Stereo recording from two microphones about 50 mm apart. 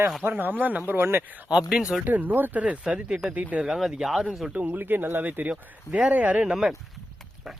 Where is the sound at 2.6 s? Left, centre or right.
Right.